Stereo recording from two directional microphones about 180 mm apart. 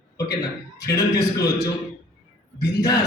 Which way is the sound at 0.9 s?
20° left (ahead or behind).